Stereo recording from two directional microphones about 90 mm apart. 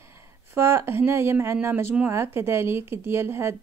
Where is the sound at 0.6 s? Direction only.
30° right (ahead or behind).